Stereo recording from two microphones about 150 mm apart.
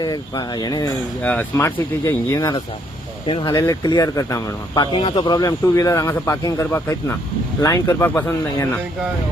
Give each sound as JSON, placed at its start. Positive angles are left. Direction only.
{"t": 0.0, "sound": "speech", "side_deg": 30}
{"t": 1.2, "sound": "speech", "side_deg": 10}
{"t": 3.2, "sound": "speech", "side_deg": 35}
{"t": 3.5, "sound": "speech", "side_deg": 20}